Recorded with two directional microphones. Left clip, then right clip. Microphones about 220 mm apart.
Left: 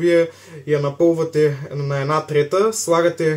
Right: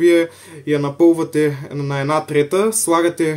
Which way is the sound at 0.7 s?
50° right (ahead or behind).